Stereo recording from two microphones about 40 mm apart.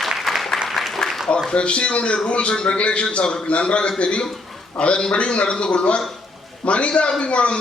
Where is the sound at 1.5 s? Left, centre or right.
Left.